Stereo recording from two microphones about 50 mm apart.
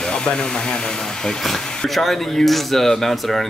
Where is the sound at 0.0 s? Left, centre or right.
Centre.